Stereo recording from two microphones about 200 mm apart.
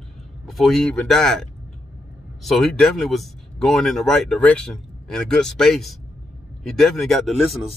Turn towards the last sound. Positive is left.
turn(degrees=0)  # may be behind; listen again after turning